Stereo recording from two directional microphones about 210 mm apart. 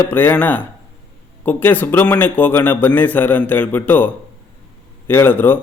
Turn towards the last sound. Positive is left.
turn(degrees=10)  # may be behind; listen again after turning